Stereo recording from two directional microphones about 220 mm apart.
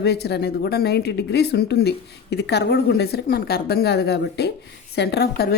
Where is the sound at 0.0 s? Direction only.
50° left (ahead or behind).